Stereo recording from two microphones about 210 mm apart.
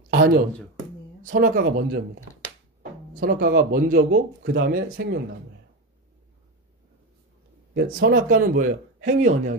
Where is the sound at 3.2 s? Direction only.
45° right (ahead or behind).